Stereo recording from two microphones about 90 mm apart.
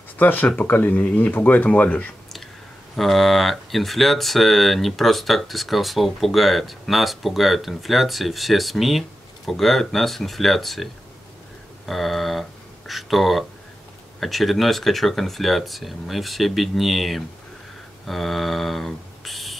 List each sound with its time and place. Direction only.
0.2 s speech: 20° left (ahead or behind)
3.0 s speech: centre (ahead or behind)